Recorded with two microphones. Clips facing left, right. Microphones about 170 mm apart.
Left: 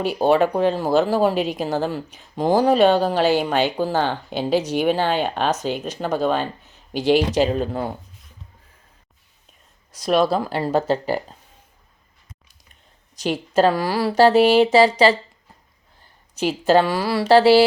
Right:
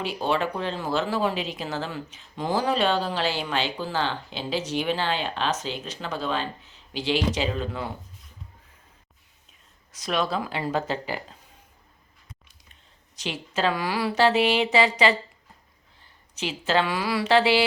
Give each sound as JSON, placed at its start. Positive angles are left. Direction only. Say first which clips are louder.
{"t": 0.0, "sound": "speech", "louder": "left 9 dB", "side_deg": 45}
{"t": 10.0, "sound": "a woman's voice", "louder": "left 8 dB", "side_deg": 35}
{"t": 13.2, "sound": "a woman's voice", "louder": "left 8 dB", "side_deg": 40}
{"t": 16.4, "sound": "a woman's voice", "louder": "left 8 dB", "side_deg": 45}